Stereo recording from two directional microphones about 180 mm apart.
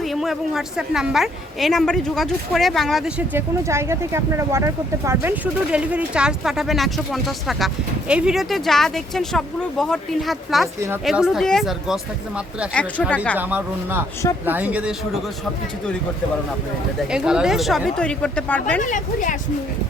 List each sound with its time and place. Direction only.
0.0 s a woman's voice: centre (ahead or behind)
13.3 s speech: 10° right (ahead or behind)
17.1 s a woman's voice: 5° right (ahead or behind)
18.8 s speech: 45° left (ahead or behind)